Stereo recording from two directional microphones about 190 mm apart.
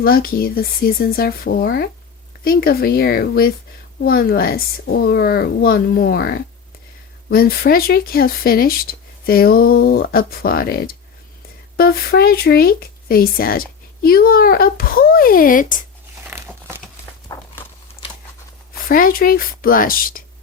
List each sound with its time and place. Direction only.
0.0 s speech: 50° left (ahead or behind)
16.2 s crumpling: 15° right (ahead or behind)
17.3 s walk: 20° left (ahead or behind)
18.0 s a sound: 30° left (ahead or behind)
18.9 s speech: 50° left (ahead or behind)